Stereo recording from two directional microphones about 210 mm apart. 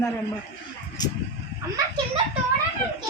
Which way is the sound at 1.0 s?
20° left (ahead or behind).